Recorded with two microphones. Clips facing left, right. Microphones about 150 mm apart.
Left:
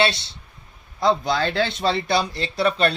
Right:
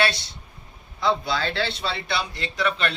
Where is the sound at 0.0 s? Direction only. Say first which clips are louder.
Left 3 dB; 25° left (ahead or behind).